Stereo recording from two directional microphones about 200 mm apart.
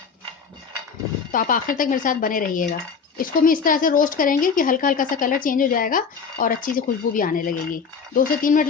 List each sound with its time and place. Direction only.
1.3 s speech: 45° left (ahead or behind)